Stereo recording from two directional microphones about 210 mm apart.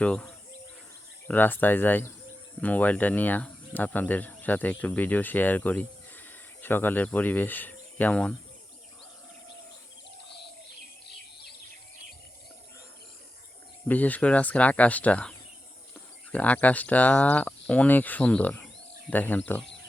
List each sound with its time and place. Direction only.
0.0 s speech: 5° left (ahead or behind)
13.8 s speech: 10° left (ahead or behind)